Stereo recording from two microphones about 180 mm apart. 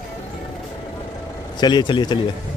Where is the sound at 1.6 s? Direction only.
25° left (ahead or behind).